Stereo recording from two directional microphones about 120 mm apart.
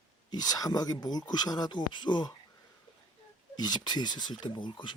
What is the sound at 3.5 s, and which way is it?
Speech, 35° left (ahead or behind).